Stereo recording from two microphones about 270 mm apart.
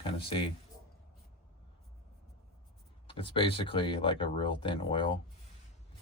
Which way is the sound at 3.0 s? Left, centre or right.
Centre.